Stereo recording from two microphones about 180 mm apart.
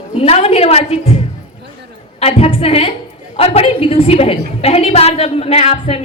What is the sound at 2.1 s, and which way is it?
A woman's voice, 35° left (ahead or behind).